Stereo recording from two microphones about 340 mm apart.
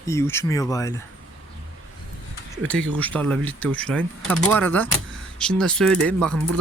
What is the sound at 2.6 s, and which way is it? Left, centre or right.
Speech, centre.